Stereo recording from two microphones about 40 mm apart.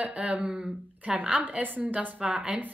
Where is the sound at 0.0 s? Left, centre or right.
Right.